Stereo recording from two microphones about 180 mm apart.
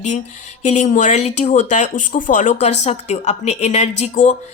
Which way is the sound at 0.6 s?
40° left (ahead or behind).